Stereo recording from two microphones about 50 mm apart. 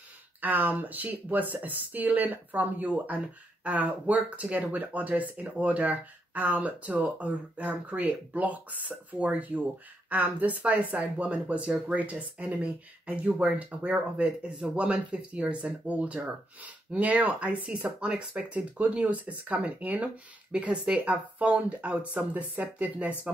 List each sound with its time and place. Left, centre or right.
0.4 s speech: right
13.3 s speech: centre
13.6 s speech: right